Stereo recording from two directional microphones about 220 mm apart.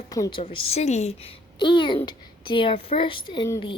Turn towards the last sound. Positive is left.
turn(degrees=20)  # may be behind; listen again after turning